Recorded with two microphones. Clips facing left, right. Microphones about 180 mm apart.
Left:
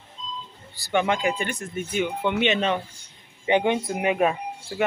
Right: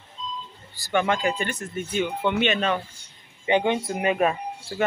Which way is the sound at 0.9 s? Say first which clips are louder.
Even; 15° left (ahead or behind).